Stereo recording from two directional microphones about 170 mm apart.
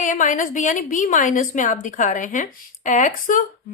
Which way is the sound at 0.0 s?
50° left (ahead or behind).